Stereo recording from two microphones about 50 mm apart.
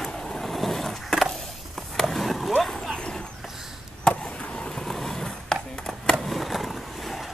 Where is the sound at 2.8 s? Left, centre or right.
Centre.